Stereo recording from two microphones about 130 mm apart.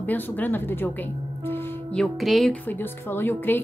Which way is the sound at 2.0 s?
Centre (ahead or behind).